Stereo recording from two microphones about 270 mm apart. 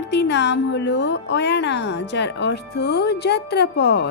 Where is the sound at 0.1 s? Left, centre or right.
Left.